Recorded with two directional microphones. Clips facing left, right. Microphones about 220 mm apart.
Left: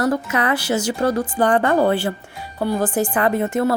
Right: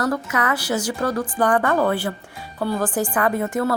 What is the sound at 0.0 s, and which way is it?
Speech, 25° left (ahead or behind).